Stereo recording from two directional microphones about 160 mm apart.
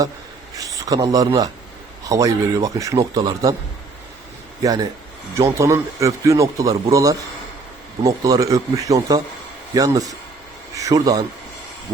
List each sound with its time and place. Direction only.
0.5 s a man's voice: 20° right (ahead or behind)
4.6 s speech: 25° right (ahead or behind)